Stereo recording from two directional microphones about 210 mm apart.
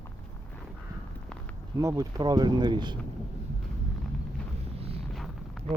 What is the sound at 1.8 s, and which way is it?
Speech, 15° right (ahead or behind).